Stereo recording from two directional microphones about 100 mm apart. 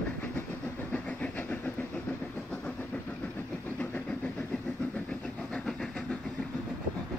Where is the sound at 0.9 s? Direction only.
15° left (ahead or behind).